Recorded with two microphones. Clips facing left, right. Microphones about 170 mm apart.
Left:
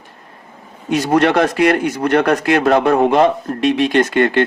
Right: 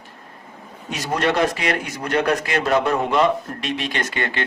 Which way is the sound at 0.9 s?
60° left (ahead or behind).